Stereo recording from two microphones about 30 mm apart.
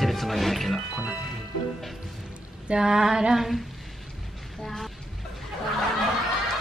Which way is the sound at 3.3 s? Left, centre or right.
Centre.